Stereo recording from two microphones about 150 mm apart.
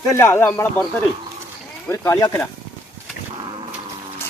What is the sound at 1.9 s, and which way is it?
Speech, 20° left (ahead or behind).